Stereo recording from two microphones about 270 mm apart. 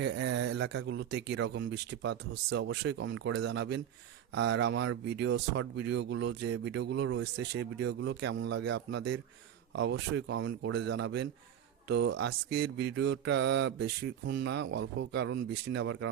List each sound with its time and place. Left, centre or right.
0.0 s speech: right